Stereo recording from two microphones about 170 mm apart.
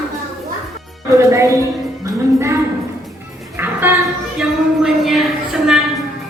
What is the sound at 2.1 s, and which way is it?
Music, 15° right (ahead or behind).